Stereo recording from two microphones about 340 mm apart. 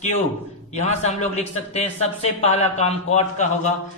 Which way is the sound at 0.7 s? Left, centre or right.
Centre.